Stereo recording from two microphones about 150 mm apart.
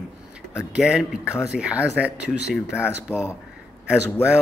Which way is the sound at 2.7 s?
15° left (ahead or behind).